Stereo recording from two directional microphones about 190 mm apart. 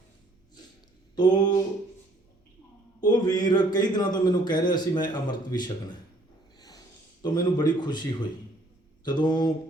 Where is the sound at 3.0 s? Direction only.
20° left (ahead or behind).